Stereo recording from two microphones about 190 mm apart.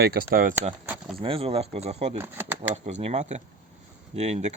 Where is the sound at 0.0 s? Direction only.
55° right (ahead or behind).